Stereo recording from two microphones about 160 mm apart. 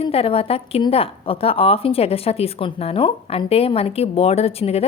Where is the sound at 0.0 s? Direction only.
35° left (ahead or behind).